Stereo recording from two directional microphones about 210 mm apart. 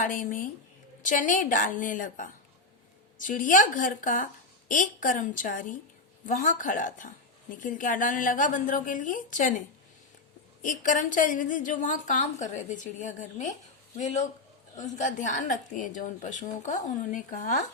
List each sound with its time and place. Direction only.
0.0 s a woman's voice: 40° left (ahead or behind)
10.6 s a woman's voice: 40° left (ahead or behind)